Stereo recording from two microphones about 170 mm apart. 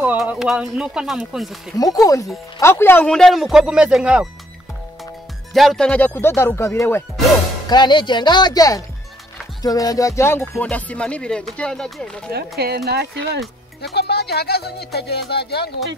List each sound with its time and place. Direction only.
0.0 s speech: 10° right (ahead or behind)
1.8 s speech: 20° left (ahead or behind); by 4.3 s 5° right (ahead or behind)
5.5 s music: centre (ahead or behind); by 7.1 s 15° left (ahead or behind)
7.7 s speech: 25° left (ahead or behind)
9.6 s music: 20° left (ahead or behind); by 11.4 s 5° left (ahead or behind)
11.5 s speech: 5° left (ahead or behind)
12.3 s speech: 70° right (ahead or behind)
13.9 s speech: 75° left (ahead or behind)